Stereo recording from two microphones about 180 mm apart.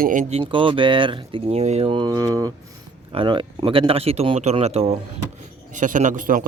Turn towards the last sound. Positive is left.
turn(degrees=-45)  # may be behind; listen again after turning